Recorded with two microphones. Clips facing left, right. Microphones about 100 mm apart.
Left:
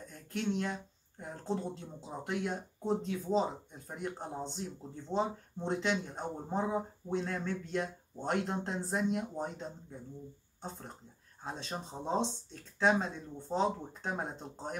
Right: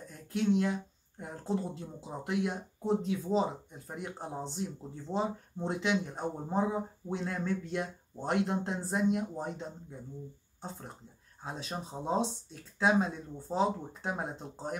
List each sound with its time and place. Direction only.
0.1 s speech: 5° right (ahead or behind)
11.4 s speech: 10° right (ahead or behind)